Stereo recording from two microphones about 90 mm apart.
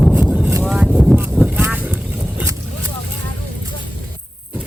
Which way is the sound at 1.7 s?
20° right (ahead or behind).